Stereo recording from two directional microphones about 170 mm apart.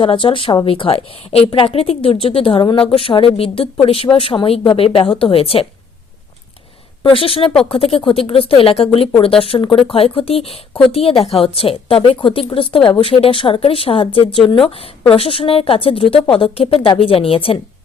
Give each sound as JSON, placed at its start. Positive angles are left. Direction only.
{"t": 0.0, "sound": "a woman's voice", "side_deg": 30}
{"t": 7.0, "sound": "a woman's voice", "side_deg": 30}